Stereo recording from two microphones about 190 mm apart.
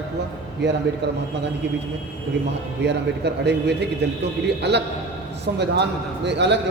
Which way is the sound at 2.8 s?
65° right (ahead or behind).